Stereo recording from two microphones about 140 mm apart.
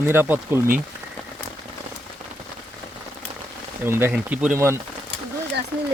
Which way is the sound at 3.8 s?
15° right (ahead or behind).